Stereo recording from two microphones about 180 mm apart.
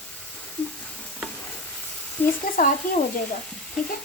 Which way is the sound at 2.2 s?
10° left (ahead or behind).